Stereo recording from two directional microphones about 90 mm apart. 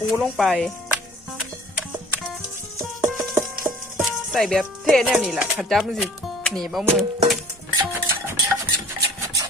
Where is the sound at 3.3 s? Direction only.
30° right (ahead or behind).